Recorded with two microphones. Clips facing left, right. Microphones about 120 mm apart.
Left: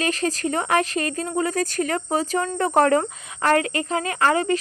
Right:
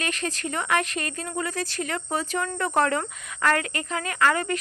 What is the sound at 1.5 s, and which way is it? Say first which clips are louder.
Speech: left 6 dB; 45° left (ahead or behind).